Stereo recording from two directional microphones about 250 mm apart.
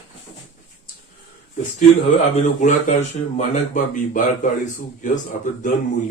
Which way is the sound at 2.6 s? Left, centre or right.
Left.